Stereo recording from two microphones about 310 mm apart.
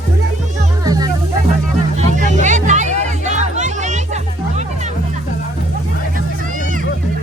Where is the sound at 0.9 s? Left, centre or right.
Centre.